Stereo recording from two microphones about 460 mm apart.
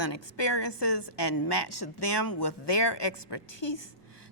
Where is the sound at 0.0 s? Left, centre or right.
Left.